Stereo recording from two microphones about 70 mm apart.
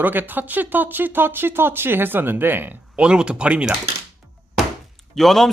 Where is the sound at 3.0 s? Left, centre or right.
Centre.